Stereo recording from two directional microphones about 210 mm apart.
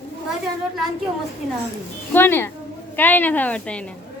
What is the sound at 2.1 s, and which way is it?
A woman's voice, 10° left (ahead or behind).